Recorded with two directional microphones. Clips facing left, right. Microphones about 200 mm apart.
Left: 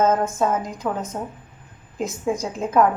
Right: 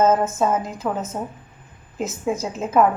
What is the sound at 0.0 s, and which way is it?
A woman's voice, 5° right (ahead or behind).